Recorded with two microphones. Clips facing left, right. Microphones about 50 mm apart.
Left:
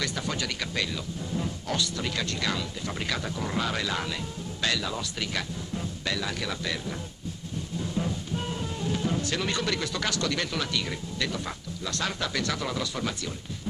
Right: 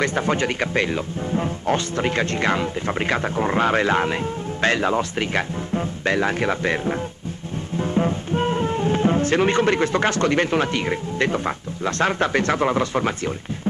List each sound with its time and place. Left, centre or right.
0.0 s speech: right